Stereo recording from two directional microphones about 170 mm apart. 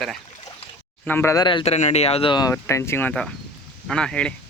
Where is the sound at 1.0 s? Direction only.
15° left (ahead or behind).